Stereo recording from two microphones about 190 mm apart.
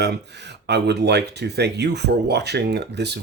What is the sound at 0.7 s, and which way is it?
Speech, 60° right (ahead or behind).